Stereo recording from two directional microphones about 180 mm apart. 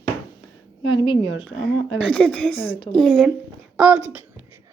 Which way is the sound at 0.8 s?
25° left (ahead or behind).